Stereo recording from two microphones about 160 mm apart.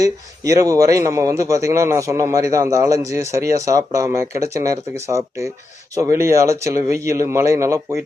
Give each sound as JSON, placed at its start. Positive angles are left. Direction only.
{"t": 0.0, "sound": "a man's voice", "side_deg": -20}